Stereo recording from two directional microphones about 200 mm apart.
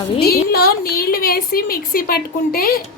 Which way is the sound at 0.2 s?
50° left (ahead or behind).